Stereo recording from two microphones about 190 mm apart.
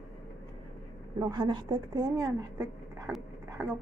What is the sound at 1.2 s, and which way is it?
A woman's voice, 20° right (ahead or behind).